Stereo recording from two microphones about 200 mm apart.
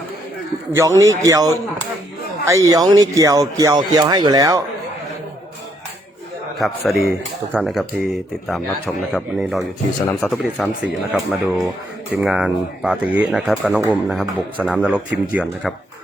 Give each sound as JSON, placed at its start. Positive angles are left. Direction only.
{"t": 0.7, "sound": "speech", "side_deg": -15}
{"t": 6.6, "sound": "speech", "side_deg": 0}
{"t": 10.1, "sound": "speech", "side_deg": 10}
{"t": 10.3, "sound": "speech", "side_deg": -5}